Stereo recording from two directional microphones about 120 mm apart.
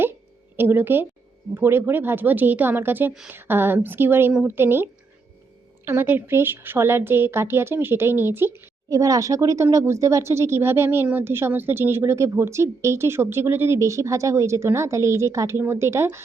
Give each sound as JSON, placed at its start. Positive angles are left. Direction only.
{"t": 0.5, "sound": "a woman's voice", "side_deg": -20}